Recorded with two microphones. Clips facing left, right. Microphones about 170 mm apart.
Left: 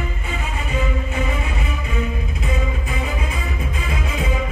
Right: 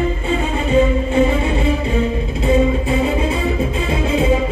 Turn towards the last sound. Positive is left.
turn(degrees=-30)  # may be behind; listen again after turning